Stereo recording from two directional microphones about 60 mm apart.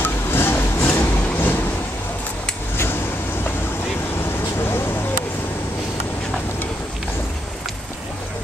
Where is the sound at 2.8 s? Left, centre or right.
Left.